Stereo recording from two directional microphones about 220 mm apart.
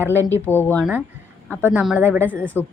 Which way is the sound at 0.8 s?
Centre (ahead or behind).